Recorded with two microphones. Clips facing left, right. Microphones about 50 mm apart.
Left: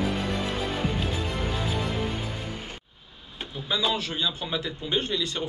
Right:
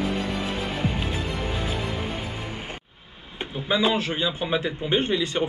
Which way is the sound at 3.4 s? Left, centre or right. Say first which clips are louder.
Right 5 dB; right.